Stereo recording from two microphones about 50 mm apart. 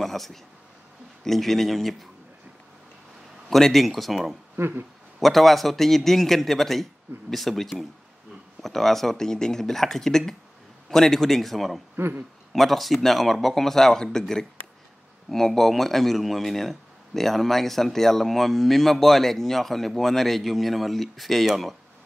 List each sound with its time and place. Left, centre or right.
0.0 s a man's voice: centre
3.4 s a man's voice: centre
4.6 s speech: right
5.2 s a man's voice: centre
12.0 s speech: right
12.5 s a man's voice: centre